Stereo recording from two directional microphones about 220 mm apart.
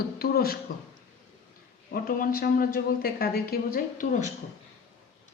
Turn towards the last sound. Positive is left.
turn(degrees=40)  # may be behind; listen again after turning